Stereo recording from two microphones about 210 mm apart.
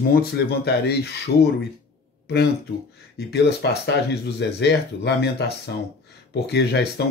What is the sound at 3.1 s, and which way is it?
Speech, 50° left (ahead or behind).